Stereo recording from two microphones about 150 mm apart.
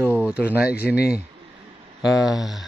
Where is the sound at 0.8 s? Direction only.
90° left.